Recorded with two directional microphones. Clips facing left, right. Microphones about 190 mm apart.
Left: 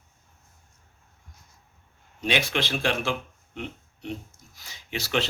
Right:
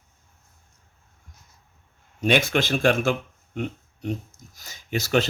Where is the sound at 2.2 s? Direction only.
45° right (ahead or behind).